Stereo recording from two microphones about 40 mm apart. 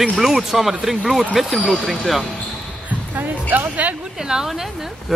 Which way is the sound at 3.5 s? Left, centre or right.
Right.